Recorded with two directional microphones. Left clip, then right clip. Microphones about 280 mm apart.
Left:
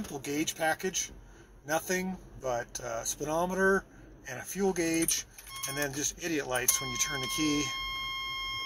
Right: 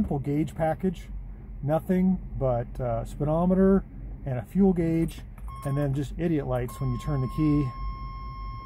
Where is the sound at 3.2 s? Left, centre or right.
Left.